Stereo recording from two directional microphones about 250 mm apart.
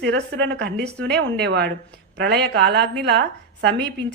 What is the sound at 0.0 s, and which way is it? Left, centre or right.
A woman's voice, right.